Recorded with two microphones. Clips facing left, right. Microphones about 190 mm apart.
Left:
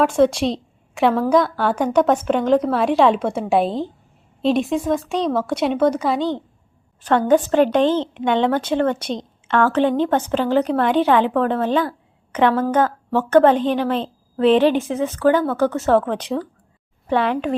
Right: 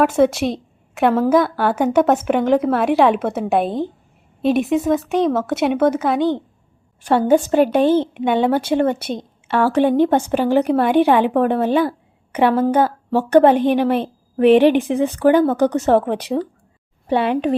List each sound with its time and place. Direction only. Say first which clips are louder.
0.0 s a woman's voice: right 1 dB; 5° right (ahead or behind)
14.8 s speech: right 4 dB; 60° right (ahead or behind)
15.0 s a woman's voice: right 3 dB; 15° right (ahead or behind)